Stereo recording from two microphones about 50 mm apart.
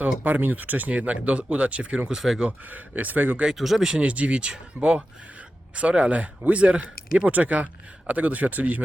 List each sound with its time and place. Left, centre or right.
0.0 s speech: right
2.1 s speech: centre
2.6 s speech: right
3.5 s speech: centre
4.0 s speech: right